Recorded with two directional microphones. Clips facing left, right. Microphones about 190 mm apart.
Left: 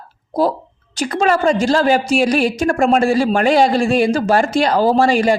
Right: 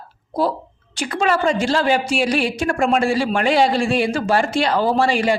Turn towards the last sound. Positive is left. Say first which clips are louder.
# left 4 dB
turn(degrees=40)  # may be behind; listen again after turning